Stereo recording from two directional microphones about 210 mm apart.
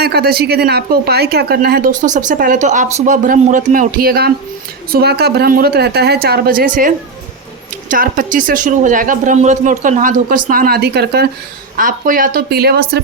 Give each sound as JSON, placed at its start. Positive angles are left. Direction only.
{"t": 0.0, "sound": "speech", "side_deg": -50}